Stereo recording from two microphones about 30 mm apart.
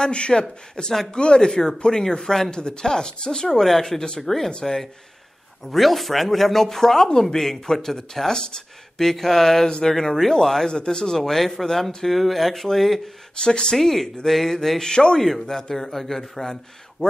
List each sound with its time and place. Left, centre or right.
0.0 s speech: left
3.4 s speech: centre
5.7 s speech: centre; by 9.0 s left
9.0 s speech: centre
10.7 s speech: left
11.2 s speech: centre
13.4 s speech: left
13.7 s speech: centre
14.9 s speech: left
15.1 s speech: centre
17.0 s speech: left